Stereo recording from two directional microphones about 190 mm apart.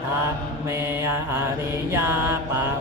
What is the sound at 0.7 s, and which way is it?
Mantra, 15° right (ahead or behind).